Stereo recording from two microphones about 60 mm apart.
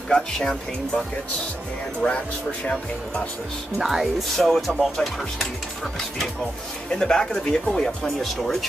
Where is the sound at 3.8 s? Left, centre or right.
Centre.